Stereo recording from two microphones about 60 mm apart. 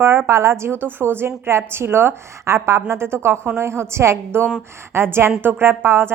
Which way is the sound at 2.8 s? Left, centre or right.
Right.